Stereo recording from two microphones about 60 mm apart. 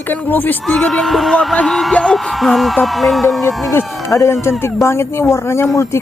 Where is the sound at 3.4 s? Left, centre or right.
Left.